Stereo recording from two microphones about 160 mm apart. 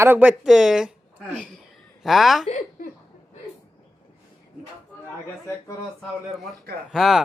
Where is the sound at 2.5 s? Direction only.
50° left (ahead or behind).